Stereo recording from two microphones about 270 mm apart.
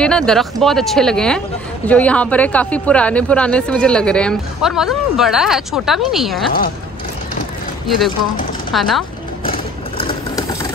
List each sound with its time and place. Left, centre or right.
0.0 s speech: centre
8.7 s speech: centre
9.4 s vehicle: left